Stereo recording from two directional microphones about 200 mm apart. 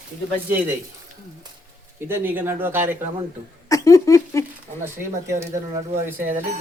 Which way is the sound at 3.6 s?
15° left (ahead or behind).